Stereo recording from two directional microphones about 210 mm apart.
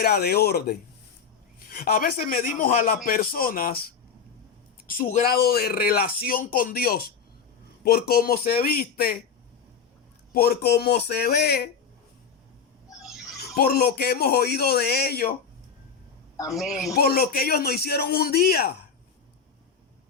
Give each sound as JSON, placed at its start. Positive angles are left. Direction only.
{"t": 0.0, "sound": "a man's voice", "side_deg": 50}
{"t": 10.3, "sound": "a man's voice", "side_deg": 45}
{"t": 13.6, "sound": "a man's voice", "side_deg": 45}
{"t": 16.6, "sound": "speech", "side_deg": 0}
{"t": 16.9, "sound": "a man's voice", "side_deg": 45}